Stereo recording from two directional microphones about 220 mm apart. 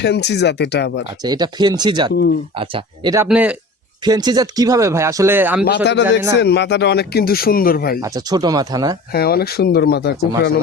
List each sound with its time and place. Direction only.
0.0 s speech: 50° left (ahead or behind)
1.2 s speech: 20° right (ahead or behind)
3.2 s a man's voice: 5° right (ahead or behind)
4.0 s speech: 20° right (ahead or behind)
5.6 s speech: 50° left (ahead or behind)
8.0 s speech: 15° right (ahead or behind)
9.1 s speech: 45° left (ahead or behind)